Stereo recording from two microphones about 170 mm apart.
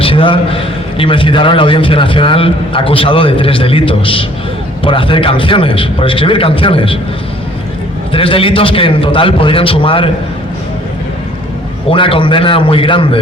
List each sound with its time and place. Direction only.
0.0 s a man's voice: 30° left (ahead or behind)
8.1 s a man's voice: 30° left (ahead or behind)
11.9 s a man's voice: 30° left (ahead or behind)